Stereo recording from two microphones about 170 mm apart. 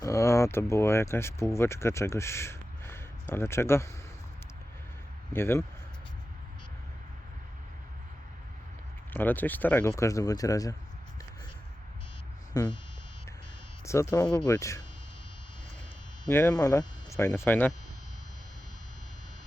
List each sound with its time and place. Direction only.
0.0 s speech: 15° left (ahead or behind)
5.3 s speech: 15° left (ahead or behind)
9.1 s speech: 10° left (ahead or behind)
12.5 s speech: 20° left (ahead or behind)
13.8 s speech: 15° left (ahead or behind)
16.3 s speech: 15° left (ahead or behind)